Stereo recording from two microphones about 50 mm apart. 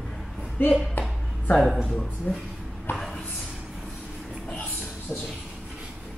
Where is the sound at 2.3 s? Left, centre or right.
Centre.